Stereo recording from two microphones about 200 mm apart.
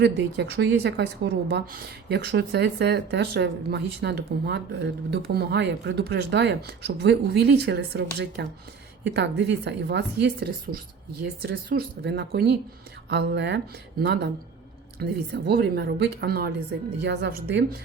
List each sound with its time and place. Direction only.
0.0 s a woman's voice: 55° right (ahead or behind)